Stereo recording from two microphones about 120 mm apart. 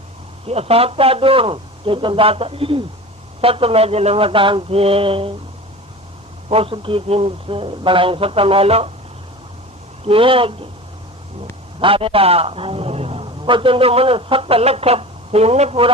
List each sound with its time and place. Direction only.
0.4 s a man's voice: 55° right (ahead or behind)
6.5 s a man's voice: 50° right (ahead or behind)
10.0 s a man's voice: 50° right (ahead or behind)
11.8 s a man's voice: 50° right (ahead or behind)